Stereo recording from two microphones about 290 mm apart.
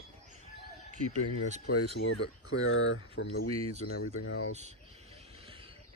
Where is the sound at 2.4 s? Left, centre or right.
Left.